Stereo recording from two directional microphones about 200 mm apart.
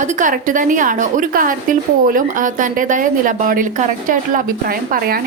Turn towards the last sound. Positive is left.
turn(degrees=-45)  # may be behind; listen again after turning